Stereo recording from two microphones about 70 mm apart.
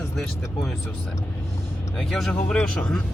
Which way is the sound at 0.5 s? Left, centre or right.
Centre.